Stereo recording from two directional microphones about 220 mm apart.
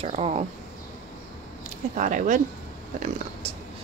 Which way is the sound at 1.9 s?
35° right (ahead or behind).